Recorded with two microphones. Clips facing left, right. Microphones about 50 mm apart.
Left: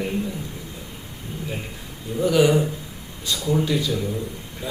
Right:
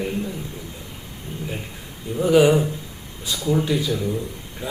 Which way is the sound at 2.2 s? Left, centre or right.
Centre.